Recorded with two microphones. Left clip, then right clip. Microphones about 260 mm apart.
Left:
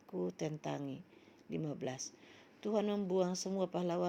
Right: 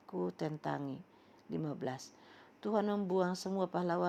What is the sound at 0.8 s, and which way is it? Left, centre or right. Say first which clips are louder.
Speech: right 2 dB; right.